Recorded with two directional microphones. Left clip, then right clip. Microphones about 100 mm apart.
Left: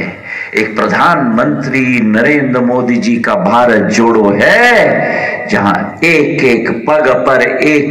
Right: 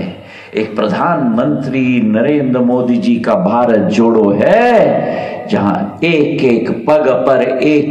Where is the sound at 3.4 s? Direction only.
15° right (ahead or behind).